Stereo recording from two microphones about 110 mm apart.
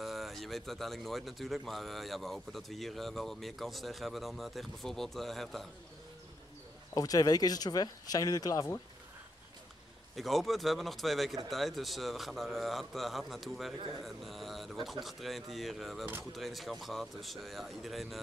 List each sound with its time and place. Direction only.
0.0 s speech: centre (ahead or behind)
6.9 s speech: 35° left (ahead or behind)
10.1 s speech: centre (ahead or behind)